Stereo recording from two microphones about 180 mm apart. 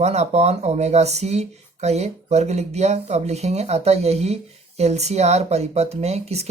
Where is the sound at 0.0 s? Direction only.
40° right (ahead or behind).